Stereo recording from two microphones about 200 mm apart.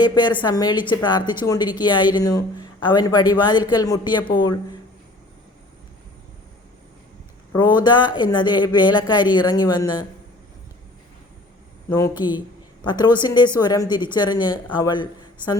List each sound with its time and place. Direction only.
0.0 s a woman's voice: 20° left (ahead or behind)
7.5 s a woman's voice: 20° left (ahead or behind)
11.9 s a woman's voice: 15° left (ahead or behind)